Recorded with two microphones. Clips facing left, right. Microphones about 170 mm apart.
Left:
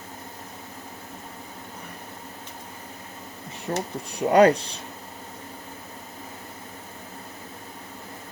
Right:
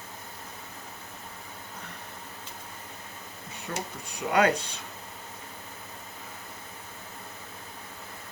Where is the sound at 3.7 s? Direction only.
35° left (ahead or behind).